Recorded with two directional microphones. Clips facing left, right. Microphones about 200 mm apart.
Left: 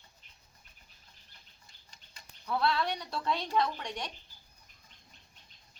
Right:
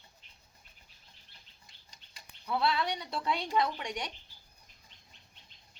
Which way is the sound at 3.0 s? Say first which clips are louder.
Even; centre (ahead or behind).